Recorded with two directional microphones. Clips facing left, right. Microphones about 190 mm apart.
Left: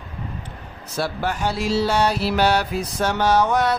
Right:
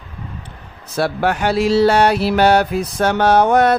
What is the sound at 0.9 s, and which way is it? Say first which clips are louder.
Music: right 6 dB; 65° right (ahead or behind).